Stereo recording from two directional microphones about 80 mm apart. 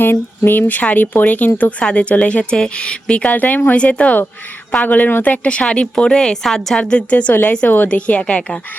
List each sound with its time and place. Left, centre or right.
0.0 s a woman's voice: left